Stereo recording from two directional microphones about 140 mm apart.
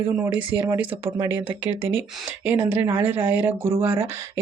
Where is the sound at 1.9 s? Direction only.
15° right (ahead or behind).